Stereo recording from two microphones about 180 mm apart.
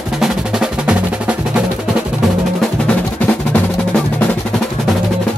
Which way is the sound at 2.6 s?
5° left (ahead or behind).